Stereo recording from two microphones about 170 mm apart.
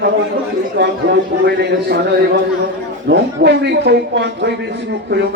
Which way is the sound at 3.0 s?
85° right.